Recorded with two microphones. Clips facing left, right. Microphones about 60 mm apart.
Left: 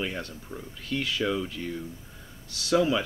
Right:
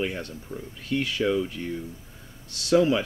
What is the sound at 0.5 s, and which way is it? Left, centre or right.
Speech, left.